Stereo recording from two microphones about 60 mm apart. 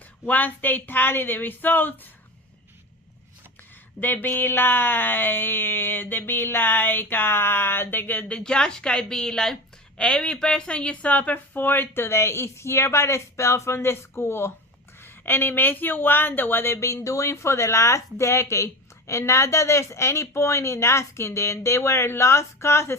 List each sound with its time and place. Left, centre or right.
0.3 s speech: left
4.0 s speech: left
8.4 s speech: centre; by 16.7 s left
16.7 s speech: left